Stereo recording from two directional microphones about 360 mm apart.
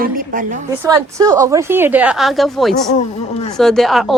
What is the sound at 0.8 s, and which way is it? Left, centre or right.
Speech, centre.